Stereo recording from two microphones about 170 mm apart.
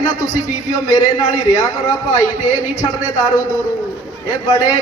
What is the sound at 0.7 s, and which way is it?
Speech, 20° left (ahead or behind).